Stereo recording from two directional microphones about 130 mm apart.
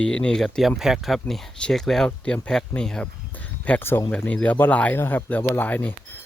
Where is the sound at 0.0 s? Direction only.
5° left (ahead or behind).